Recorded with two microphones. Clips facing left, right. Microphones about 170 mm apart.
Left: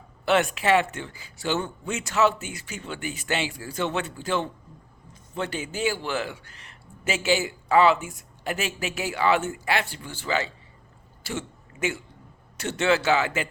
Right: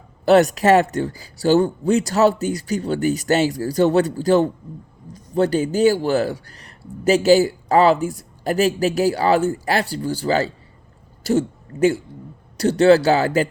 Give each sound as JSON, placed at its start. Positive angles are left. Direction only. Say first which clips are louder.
{"t": 0.3, "sound": "speech", "louder": "right 8 dB", "side_deg": -40}